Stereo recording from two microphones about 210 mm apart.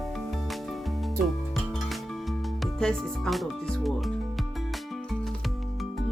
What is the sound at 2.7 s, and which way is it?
Music, centre (ahead or behind).